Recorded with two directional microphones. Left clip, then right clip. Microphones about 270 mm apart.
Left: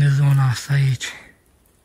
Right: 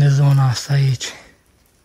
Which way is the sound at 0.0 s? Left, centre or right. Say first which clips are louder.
Right 3 dB; centre.